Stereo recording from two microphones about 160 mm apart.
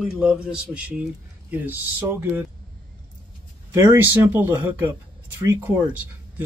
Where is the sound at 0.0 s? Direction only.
5° right (ahead or behind).